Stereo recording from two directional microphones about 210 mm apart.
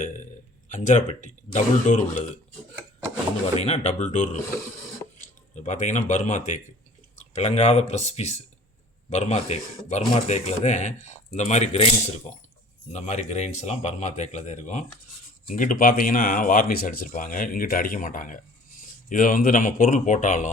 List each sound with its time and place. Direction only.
0.7 s speech: 35° left (ahead or behind)
3.4 s speech: 30° left (ahead or behind)